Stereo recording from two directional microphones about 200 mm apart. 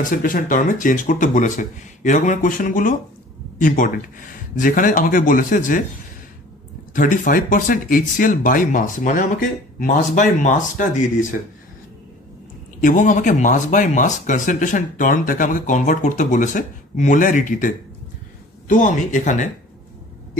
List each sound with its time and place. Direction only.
0.0 s speech: 40° left (ahead or behind)
6.9 s speech: 40° left (ahead or behind)
12.8 s speech: 40° left (ahead or behind)